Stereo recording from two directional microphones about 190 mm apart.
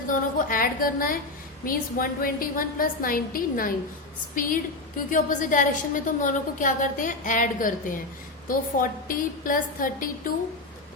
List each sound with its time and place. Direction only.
0.1 s a woman's voice: 45° left (ahead or behind)